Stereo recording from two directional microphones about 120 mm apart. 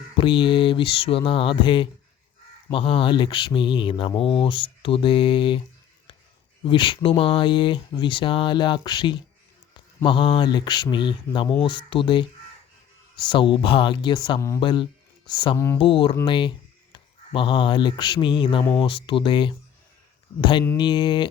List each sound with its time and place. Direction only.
0.2 s speech: 45° left (ahead or behind)
6.7 s speech: 40° left (ahead or behind)
15.5 s speech: 20° left (ahead or behind)
15.8 s speech: 45° left (ahead or behind)